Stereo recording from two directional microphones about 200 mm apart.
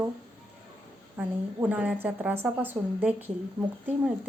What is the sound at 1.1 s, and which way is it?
A woman's voice, 10° right (ahead or behind).